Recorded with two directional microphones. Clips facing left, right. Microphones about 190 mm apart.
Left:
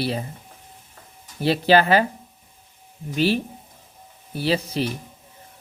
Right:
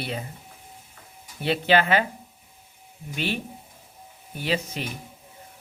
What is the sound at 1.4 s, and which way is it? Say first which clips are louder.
Speech: left 4 dB; 35° left (ahead or behind).